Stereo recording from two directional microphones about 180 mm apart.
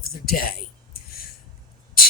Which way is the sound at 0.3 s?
55° left (ahead or behind).